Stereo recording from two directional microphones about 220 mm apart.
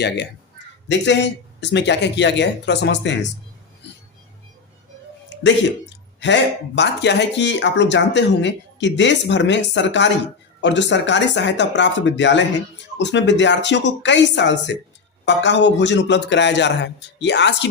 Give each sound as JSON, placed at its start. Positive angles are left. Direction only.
{"t": 0.9, "sound": "speech", "side_deg": 55}
{"t": 5.3, "sound": "a sound", "side_deg": 55}
{"t": 6.1, "sound": "speech", "side_deg": 55}